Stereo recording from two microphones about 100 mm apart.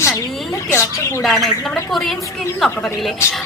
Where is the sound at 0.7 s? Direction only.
25° left (ahead or behind).